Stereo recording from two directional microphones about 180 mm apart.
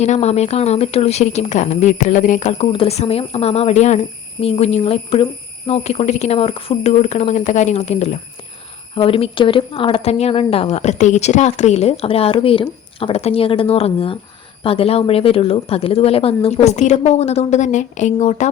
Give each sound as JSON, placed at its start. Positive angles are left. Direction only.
{"t": 0.0, "sound": "speech", "side_deg": 35}